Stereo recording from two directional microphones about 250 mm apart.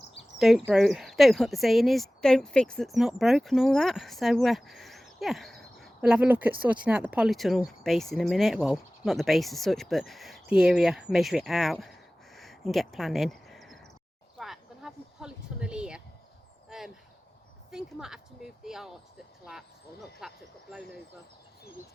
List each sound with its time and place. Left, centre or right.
0.3 s speech: centre
14.3 s a sound: centre
17.7 s speech: centre